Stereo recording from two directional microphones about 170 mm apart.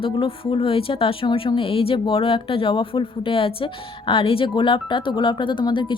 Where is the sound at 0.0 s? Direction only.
30° left (ahead or behind).